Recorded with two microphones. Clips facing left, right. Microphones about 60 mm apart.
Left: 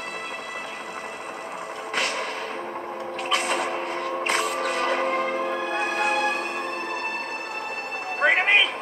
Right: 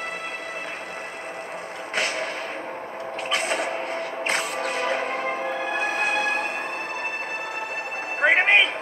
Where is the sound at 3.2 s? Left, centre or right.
Centre.